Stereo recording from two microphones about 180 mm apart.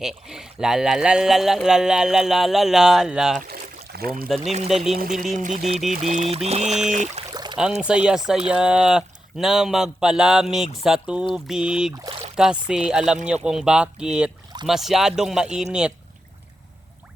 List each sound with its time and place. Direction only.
0.0 s speech: 5° right (ahead or behind)
3.4 s a sound: 55° right (ahead or behind)
4.7 s speech: centre (ahead or behind)
4.9 s speech: 50° right (ahead or behind)
6.7 s speech: 5° right (ahead or behind)
6.9 s speech: 40° right (ahead or behind)
7.3 s a sound: 25° right (ahead or behind)
7.8 s speech: 5° right (ahead or behind)